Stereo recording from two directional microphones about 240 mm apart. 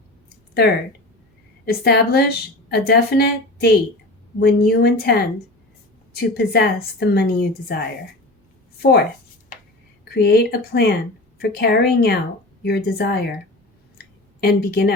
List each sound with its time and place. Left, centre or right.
1.6 s a woman's voice: left
10.2 s a woman's voice: left
14.0 s a sound: left